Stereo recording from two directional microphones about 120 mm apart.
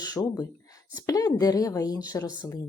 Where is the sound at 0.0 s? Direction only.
30° left (ahead or behind).